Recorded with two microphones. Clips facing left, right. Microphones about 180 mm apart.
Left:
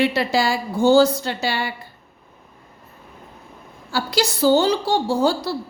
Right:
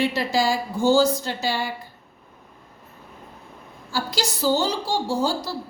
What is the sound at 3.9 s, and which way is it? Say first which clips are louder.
A woman's voice: left 5 dB; 65° left (ahead or behind).